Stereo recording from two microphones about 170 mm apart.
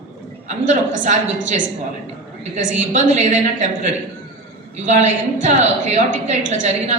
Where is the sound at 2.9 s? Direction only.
45° right (ahead or behind).